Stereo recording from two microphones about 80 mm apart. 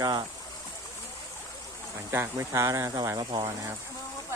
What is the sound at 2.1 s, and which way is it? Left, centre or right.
Speech, right.